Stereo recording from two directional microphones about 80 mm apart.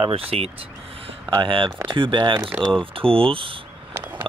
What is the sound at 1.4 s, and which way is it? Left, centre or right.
Speech, right.